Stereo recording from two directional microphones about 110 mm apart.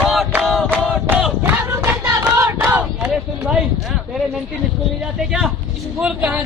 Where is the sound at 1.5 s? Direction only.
20° right (ahead or behind).